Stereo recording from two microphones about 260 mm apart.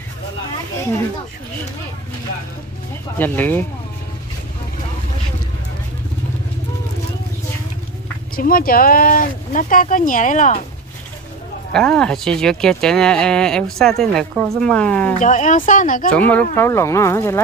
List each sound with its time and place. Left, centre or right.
3.2 s speech: centre
8.4 s speech: left
11.7 s speech: centre
15.2 s speech: left
16.1 s speech: centre